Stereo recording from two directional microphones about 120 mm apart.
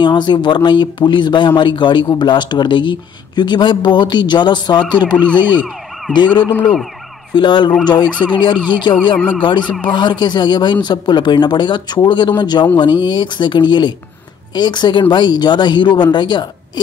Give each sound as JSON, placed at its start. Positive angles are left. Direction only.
{"t": 0.0, "sound": "speech", "side_deg": 40}
{"t": 6.1, "sound": "speech", "side_deg": 40}
{"t": 6.5, "sound": "speech", "side_deg": 15}
{"t": 7.3, "sound": "speech", "side_deg": 40}